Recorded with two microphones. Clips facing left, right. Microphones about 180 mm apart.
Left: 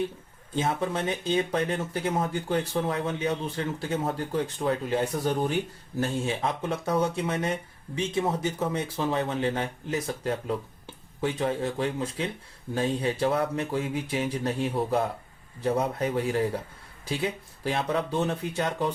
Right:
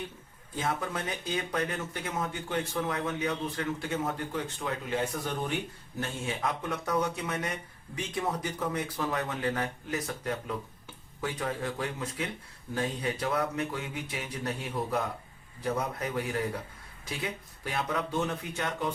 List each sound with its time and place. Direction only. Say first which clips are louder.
0.5 s speech: left 5 dB; 25° left (ahead or behind)